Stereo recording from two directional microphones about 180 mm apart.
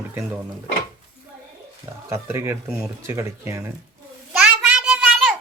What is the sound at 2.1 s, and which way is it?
Speech, 15° right (ahead or behind).